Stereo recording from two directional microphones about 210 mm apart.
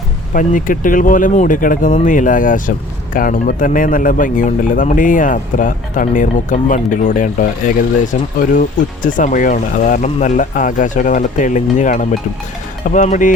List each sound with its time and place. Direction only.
0.3 s speech: 40° left (ahead or behind)